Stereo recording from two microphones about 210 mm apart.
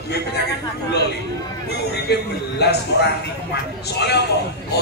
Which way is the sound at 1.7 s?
50° left (ahead or behind).